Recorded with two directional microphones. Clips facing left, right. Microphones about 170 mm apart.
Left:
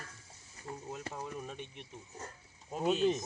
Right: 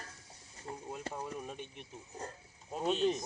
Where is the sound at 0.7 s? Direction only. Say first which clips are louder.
Even; 30° right (ahead or behind).